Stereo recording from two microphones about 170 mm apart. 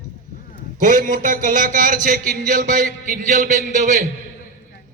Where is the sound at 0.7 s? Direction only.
50° right (ahead or behind).